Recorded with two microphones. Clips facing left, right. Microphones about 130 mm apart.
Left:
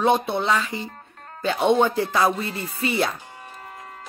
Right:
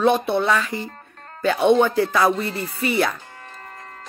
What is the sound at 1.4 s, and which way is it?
Speech, 20° left (ahead or behind).